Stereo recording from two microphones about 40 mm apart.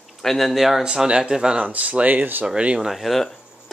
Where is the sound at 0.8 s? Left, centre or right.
Centre.